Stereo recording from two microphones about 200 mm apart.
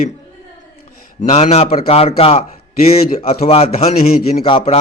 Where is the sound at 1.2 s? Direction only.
35° left (ahead or behind).